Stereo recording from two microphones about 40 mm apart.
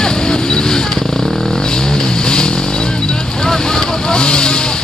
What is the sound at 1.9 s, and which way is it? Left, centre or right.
Vehicle, left.